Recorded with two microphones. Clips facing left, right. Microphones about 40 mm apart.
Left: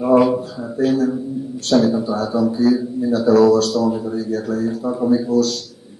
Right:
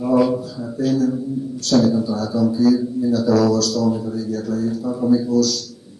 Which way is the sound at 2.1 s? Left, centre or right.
Left.